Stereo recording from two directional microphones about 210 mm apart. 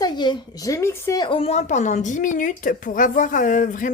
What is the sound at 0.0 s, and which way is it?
A woman's voice, 20° left (ahead or behind).